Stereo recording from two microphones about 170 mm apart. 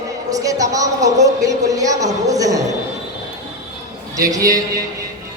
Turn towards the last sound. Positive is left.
turn(degrees=-20)  # may be behind; listen again after turning